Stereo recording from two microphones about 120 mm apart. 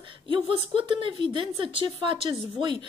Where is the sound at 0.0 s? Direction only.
45° right (ahead or behind).